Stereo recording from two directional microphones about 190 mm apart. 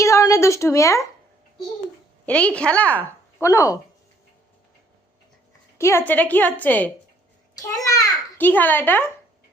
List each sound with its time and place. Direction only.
0.0 s a woman's voice: 15° left (ahead or behind)
2.2 s a woman's voice: 5° left (ahead or behind)
5.7 s a woman's voice: 15° left (ahead or behind)